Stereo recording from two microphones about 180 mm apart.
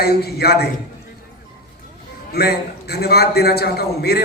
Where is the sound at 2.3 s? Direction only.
60° left (ahead or behind).